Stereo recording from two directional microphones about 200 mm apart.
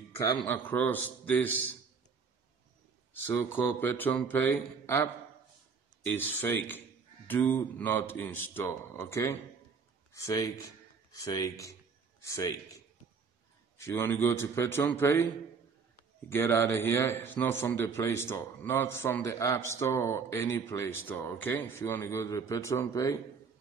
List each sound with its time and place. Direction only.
0.2 s a man's voice: 15° left (ahead or behind)
3.3 s a man's voice: 10° left (ahead or behind)
16.3 s a man's voice: 10° left (ahead or behind)